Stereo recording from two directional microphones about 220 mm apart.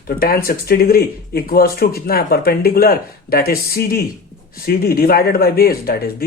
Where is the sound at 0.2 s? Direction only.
40° left (ahead or behind).